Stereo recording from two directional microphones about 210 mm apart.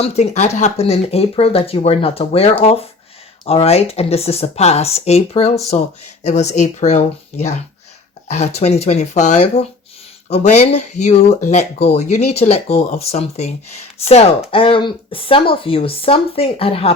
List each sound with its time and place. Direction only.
0.0 s speech: 30° left (ahead or behind)
8.3 s speech: 30° left (ahead or behind)